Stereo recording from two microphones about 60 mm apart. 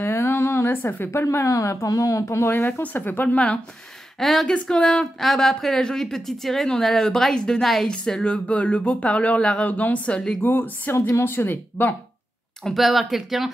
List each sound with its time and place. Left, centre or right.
0.0 s a sound: left
1.2 s speech: left
4.2 s speech: centre
4.6 s a woman's voice: centre
5.2 s a woman's voice: centre
7.6 s speech: centre
7.9 s speech: centre
9.7 s speech: left
10.4 s speech: left
12.6 s speech: centre